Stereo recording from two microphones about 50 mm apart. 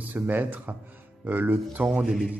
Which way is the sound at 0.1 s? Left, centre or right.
Right.